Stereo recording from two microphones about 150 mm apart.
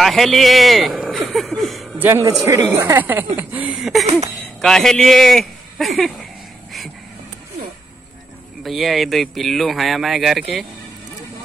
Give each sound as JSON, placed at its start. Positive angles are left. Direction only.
{"t": 0.0, "sound": "speech", "side_deg": 0}
{"t": 2.0, "sound": "speech", "side_deg": -15}
{"t": 8.6, "sound": "speech", "side_deg": 0}